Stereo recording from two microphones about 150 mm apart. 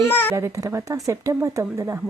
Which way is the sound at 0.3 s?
20° right (ahead or behind).